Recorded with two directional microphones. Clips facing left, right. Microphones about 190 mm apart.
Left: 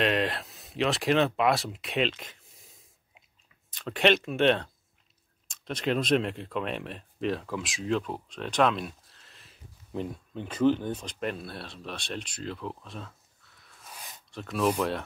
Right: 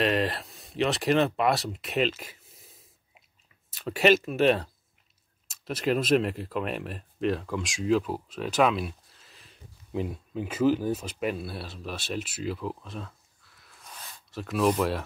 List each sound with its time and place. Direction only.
0.0 s speech: centre (ahead or behind)